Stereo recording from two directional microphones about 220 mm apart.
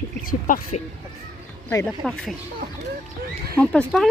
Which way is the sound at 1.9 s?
Centre (ahead or behind).